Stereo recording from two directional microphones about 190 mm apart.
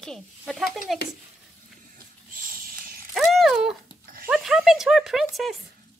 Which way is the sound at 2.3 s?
45° right (ahead or behind).